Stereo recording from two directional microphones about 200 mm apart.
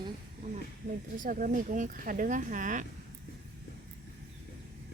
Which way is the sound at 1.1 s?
40° right (ahead or behind).